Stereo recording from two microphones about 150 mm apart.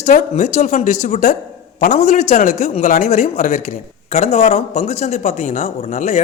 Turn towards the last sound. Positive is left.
turn(degrees=50)  # may be behind; listen again after turning